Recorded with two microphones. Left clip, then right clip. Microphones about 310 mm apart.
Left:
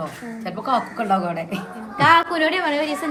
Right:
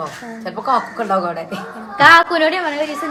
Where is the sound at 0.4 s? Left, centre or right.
Centre.